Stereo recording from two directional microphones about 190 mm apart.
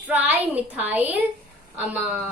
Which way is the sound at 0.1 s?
10° right (ahead or behind).